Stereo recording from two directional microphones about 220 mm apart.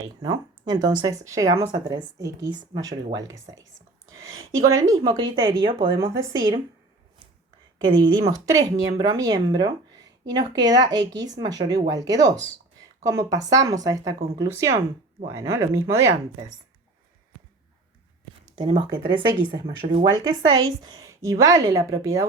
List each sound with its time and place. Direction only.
0.2 s speech: 20° right (ahead or behind)
3.8 s whispering: 65° right (ahead or behind)
4.6 s speech: 15° right (ahead or behind)
7.9 s speech: 20° right (ahead or behind)
18.5 s speech: 20° right (ahead or behind)